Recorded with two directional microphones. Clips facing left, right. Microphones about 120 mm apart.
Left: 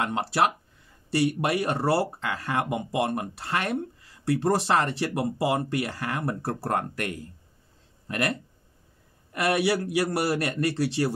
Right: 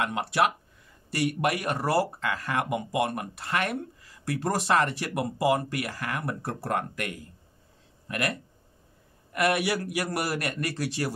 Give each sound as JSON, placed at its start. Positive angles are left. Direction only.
{"t": 0.0, "sound": "speech", "side_deg": 30}
{"t": 8.1, "sound": "speech", "side_deg": 30}